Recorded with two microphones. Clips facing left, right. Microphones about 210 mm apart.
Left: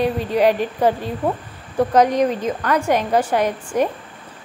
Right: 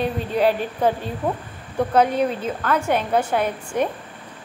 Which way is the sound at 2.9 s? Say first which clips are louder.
Left 3 dB; 10° left (ahead or behind).